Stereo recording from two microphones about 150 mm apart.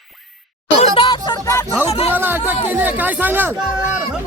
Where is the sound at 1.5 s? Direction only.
15° left (ahead or behind).